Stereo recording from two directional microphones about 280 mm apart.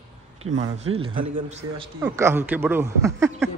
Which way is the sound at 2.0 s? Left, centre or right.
Centre.